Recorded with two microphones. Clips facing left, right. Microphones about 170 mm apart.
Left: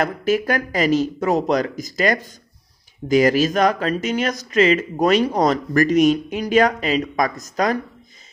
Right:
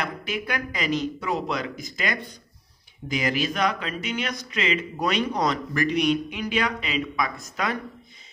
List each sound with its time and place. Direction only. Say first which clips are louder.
0.0 s speech: left 11 dB; 45° left (ahead or behind)